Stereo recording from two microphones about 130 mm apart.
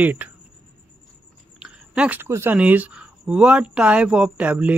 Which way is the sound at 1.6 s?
5° right (ahead or behind).